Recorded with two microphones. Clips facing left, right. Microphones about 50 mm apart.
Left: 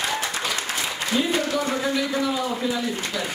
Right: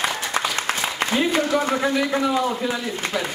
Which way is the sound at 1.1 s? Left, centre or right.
Right.